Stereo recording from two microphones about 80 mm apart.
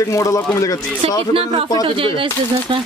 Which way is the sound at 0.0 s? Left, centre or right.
Left.